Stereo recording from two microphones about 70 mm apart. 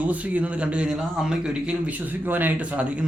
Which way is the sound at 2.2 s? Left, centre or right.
Right.